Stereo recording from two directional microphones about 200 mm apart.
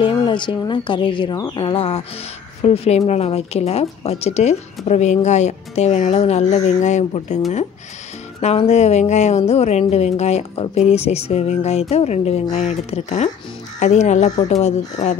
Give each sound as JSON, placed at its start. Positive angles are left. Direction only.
{"t": 0.0, "sound": "speech", "side_deg": 25}
{"t": 8.4, "sound": "speech", "side_deg": 30}